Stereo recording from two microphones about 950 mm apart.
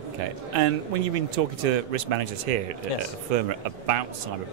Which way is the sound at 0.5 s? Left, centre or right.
Right.